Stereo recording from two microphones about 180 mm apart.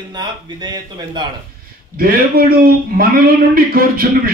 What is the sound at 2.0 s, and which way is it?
A man's voice, 55° right (ahead or behind).